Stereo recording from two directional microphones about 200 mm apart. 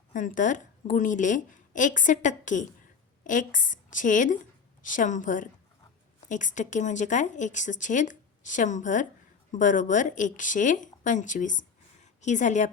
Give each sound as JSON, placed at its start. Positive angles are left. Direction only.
{"t": 0.1, "sound": "speech", "side_deg": 40}